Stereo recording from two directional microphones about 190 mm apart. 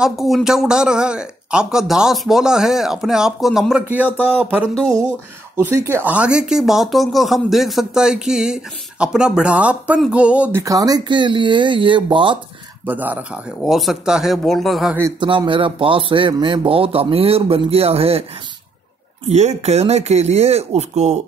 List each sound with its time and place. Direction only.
0.0 s speech: centre (ahead or behind)
10.6 s speech: 20° right (ahead or behind)
12.8 s speech: 10° right (ahead or behind)
15.1 s speech: 25° right (ahead or behind)
19.2 s speech: 35° right (ahead or behind)